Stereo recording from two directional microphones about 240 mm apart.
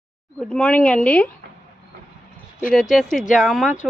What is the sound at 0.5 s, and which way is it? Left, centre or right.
Speech, centre.